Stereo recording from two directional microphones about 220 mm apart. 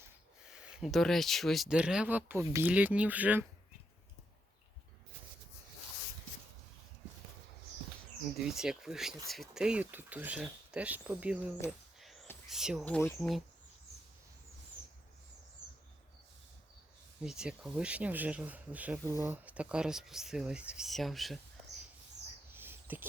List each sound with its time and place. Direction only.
0.0 s speech: 5° right (ahead or behind)
8.4 s speech: centre (ahead or behind)
11.9 s whispering: centre (ahead or behind)
12.5 s speech: centre (ahead or behind)
17.2 s speech: 5° right (ahead or behind)
22.5 s whispering: 10° right (ahead or behind)